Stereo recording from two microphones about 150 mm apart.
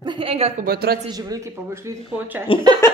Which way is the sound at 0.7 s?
90° right.